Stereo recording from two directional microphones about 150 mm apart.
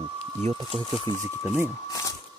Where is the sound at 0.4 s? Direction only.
40° right (ahead or behind).